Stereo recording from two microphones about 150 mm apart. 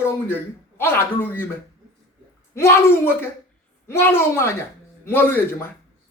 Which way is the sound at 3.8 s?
15° left (ahead or behind).